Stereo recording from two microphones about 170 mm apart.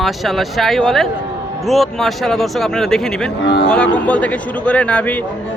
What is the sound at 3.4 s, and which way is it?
Speech, 90° left.